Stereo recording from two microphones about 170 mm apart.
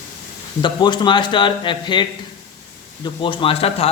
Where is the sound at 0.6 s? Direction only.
25° left (ahead or behind).